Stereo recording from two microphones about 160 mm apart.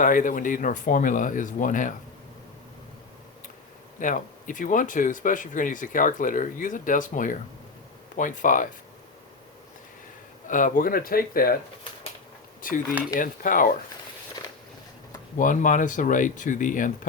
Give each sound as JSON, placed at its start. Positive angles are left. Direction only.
{"t": 0.0, "sound": "speech", "side_deg": 55}
{"t": 4.0, "sound": "speech", "side_deg": 55}
{"t": 10.4, "sound": "speech", "side_deg": 55}
{"t": 12.6, "sound": "speech", "side_deg": 60}
{"t": 15.4, "sound": "speech", "side_deg": 55}